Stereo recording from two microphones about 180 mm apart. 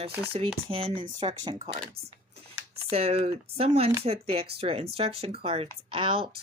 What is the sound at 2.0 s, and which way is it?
Speech, 60° right (ahead or behind).